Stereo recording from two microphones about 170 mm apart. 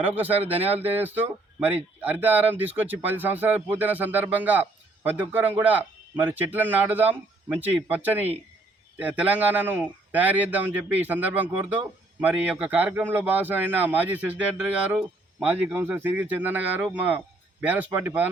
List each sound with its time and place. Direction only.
0.1 s speech: 10° right (ahead or behind)
0.5 s speech: 35° right (ahead or behind)
0.9 s speech: 10° right (ahead or behind)